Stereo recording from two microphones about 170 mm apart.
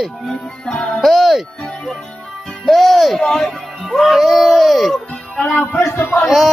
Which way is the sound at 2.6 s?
Centre (ahead or behind).